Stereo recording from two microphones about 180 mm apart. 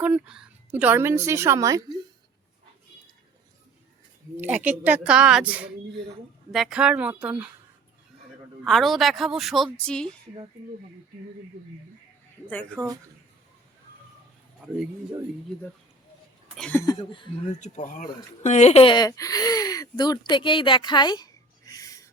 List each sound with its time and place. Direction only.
0.0 s a woman's voice: 5° right (ahead or behind)
4.4 s a woman's voice: 10° right (ahead or behind)
8.6 s a woman's voice: centre (ahead or behind)
12.5 s speech: 10° left (ahead or behind)
16.6 s a woman's voice: 5° left (ahead or behind)
17.0 s speech: 30° left (ahead or behind)
17.6 s speech: 45° left (ahead or behind); by 21.2 s 25° left (ahead or behind)
21.7 s a sound: 20° left (ahead or behind)